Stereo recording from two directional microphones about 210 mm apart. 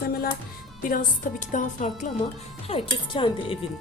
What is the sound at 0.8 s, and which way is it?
A woman's voice, 40° left (ahead or behind).